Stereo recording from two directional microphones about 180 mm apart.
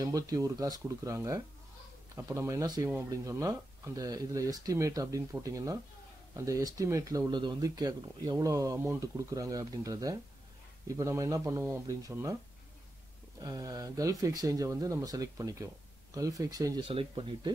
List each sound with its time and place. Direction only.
0.0 s speech: 20° right (ahead or behind)
13.4 s speech: 20° right (ahead or behind)